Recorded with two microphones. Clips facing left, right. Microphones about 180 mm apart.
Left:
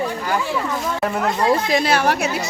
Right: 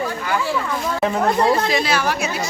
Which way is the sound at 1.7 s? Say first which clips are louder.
Left 2 dB; 55° left (ahead or behind).